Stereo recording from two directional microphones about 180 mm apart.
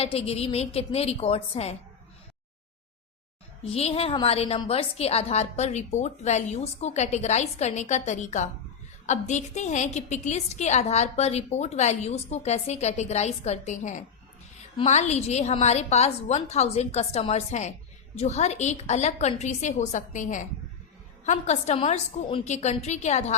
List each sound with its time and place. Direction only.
0.0 s a woman's voice: 35° left (ahead or behind)
3.6 s a woman's voice: 35° left (ahead or behind)